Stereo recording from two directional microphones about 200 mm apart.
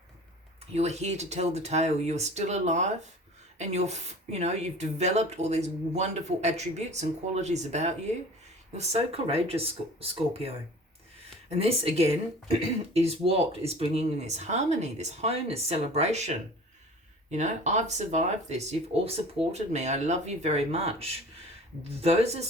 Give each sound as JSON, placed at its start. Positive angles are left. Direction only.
{"t": 0.7, "sound": "speech", "side_deg": -35}
{"t": 17.3, "sound": "speech", "side_deg": -35}